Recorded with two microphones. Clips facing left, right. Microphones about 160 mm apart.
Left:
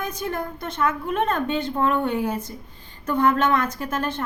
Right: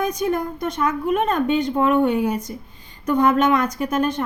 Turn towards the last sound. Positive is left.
turn(degrees=-15)  # may be behind; listen again after turning